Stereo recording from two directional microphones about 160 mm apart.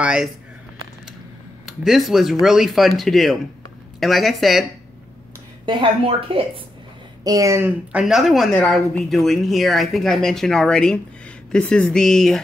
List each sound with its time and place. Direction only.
0.0 s speech: 5° right (ahead or behind)
1.7 s speech: centre (ahead or behind)
5.7 s speech: 35° right (ahead or behind)
7.2 s speech: 20° right (ahead or behind)
8.0 s speech: centre (ahead or behind)